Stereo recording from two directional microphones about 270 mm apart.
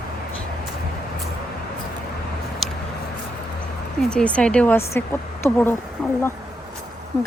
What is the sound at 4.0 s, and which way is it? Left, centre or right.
A woman's voice, centre.